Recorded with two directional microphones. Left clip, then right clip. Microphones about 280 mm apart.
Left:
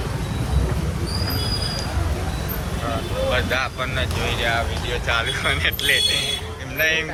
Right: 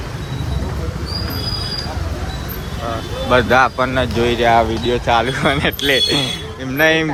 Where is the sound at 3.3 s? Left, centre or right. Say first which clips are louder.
Right 14 dB; right.